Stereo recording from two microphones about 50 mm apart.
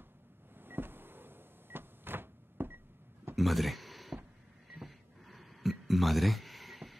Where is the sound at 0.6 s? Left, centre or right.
Right.